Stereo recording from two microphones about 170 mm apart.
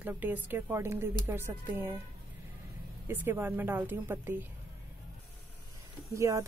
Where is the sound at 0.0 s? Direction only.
10° right (ahead or behind).